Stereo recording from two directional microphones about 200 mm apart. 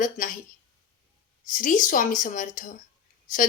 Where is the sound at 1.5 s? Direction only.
40° left (ahead or behind).